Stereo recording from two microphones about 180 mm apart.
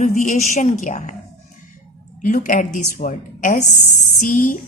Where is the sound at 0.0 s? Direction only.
45° left (ahead or behind).